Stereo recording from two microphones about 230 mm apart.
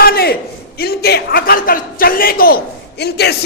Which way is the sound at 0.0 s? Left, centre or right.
Left.